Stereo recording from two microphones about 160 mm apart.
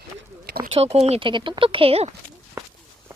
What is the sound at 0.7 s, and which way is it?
Speech, 40° right (ahead or behind).